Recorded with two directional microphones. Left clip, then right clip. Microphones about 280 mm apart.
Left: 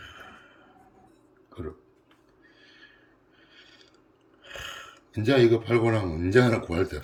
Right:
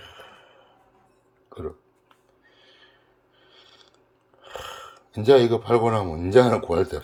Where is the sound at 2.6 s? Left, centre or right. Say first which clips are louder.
Left 1 dB; centre.